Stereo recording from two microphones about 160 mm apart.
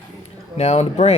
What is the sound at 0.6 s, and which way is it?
Speech, 40° left (ahead or behind).